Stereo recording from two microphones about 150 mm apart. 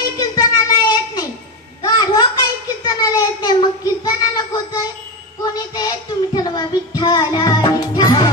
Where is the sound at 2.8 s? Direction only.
25° left (ahead or behind).